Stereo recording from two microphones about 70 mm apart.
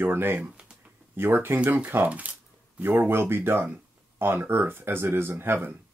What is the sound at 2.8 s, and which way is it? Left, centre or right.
Speech, right.